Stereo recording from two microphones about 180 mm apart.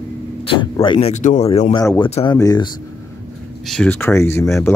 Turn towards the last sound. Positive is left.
turn(degrees=15)  # may be behind; listen again after turning